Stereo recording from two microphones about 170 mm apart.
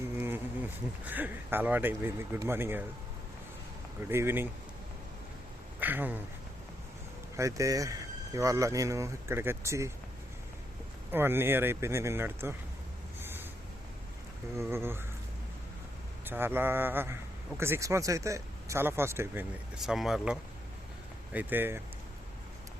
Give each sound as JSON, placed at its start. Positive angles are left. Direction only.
{"t": 0.2, "sound": "insect", "side_deg": -10}
{"t": 1.0, "sound": "speech", "side_deg": -10}
{"t": 4.1, "sound": "speech", "side_deg": -15}
{"t": 5.8, "sound": "speech", "side_deg": -10}
{"t": 7.3, "sound": "speech", "side_deg": -20}
{"t": 11.1, "sound": "speech", "side_deg": -15}
{"t": 13.1, "sound": "a sound", "side_deg": -10}
{"t": 14.5, "sound": "speech", "side_deg": -15}
{"t": 16.2, "sound": "speech", "side_deg": -10}